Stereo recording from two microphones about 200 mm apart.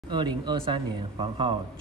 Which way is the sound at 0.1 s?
20° right (ahead or behind).